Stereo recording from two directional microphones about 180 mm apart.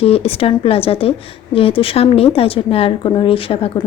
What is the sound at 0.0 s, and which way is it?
Speech, 35° left (ahead or behind).